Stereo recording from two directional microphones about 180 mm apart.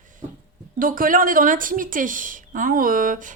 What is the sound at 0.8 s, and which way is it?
A woman's voice, 50° right (ahead or behind).